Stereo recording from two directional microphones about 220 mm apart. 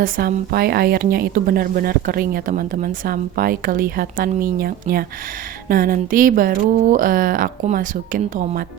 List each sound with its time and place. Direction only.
0.0 s speech: 40° right (ahead or behind)